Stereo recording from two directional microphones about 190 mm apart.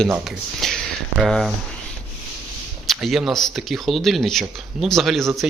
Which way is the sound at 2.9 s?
Centre (ahead or behind).